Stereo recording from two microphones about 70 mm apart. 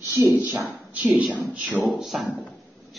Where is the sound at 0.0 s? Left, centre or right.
Right.